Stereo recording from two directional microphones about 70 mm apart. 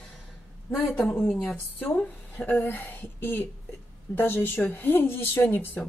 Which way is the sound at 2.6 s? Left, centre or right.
Left.